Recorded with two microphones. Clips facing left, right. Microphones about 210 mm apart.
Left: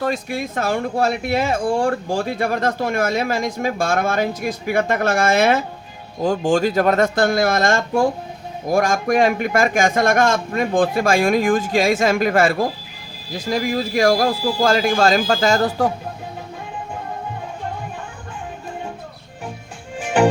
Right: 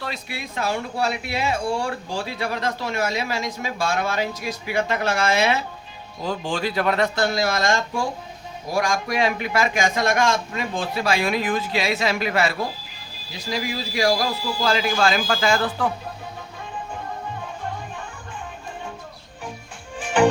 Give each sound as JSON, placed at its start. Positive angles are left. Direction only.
{"t": 0.0, "sound": "speech", "side_deg": 45}